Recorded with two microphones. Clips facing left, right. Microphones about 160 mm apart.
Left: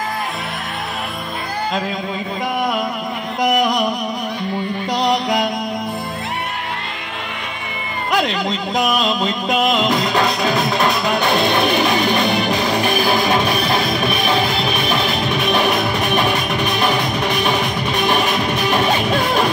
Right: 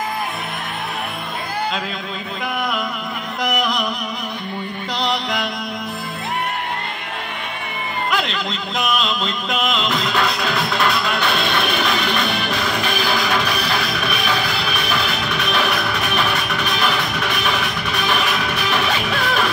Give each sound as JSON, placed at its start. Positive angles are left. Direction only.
{"t": 3.3, "sound": "music", "side_deg": 45}
{"t": 4.9, "sound": "music", "side_deg": 45}
{"t": 8.1, "sound": "speech", "side_deg": 45}
{"t": 8.7, "sound": "music", "side_deg": 40}
{"t": 10.5, "sound": "music", "side_deg": 20}
{"t": 12.9, "sound": "music", "side_deg": 45}
{"t": 15.7, "sound": "music", "side_deg": 20}
{"t": 16.0, "sound": "music", "side_deg": 45}
{"t": 16.5, "sound": "music", "side_deg": 20}
{"t": 17.3, "sound": "music", "side_deg": 40}
{"t": 19.1, "sound": "music", "side_deg": 20}